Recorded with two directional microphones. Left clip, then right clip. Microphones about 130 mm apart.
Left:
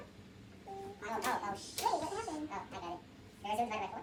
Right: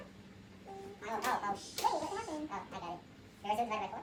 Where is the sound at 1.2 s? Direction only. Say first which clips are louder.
Right 2 dB; 45° right (ahead or behind).